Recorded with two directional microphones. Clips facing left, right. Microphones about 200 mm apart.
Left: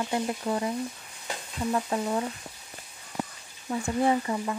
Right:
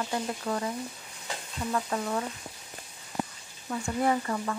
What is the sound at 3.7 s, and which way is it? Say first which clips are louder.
Speech: left 2 dB; 20° left (ahead or behind).